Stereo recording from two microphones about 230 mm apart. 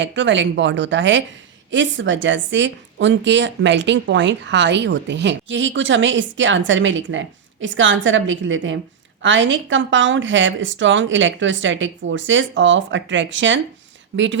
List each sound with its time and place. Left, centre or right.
0.0 s a woman's voice: right